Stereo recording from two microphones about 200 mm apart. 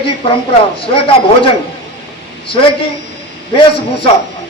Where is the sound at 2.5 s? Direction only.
25° left (ahead or behind).